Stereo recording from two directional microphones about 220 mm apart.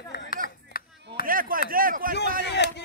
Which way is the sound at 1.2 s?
40° right (ahead or behind).